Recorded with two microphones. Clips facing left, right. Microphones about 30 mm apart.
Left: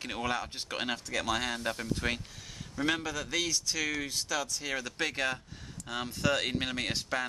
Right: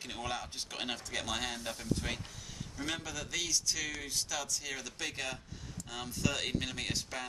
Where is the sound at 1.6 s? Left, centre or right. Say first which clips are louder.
Left 4 dB; left.